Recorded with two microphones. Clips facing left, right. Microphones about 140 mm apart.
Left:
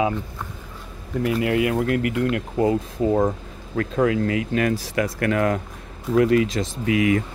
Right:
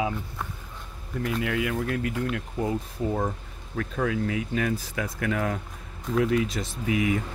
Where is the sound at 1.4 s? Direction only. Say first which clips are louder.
Left 7 dB; 65° left (ahead or behind); by 7.2 s 90° left.